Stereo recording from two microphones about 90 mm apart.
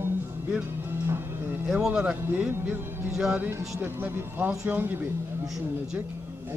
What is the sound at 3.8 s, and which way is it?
A man's voice, 25° right (ahead or behind).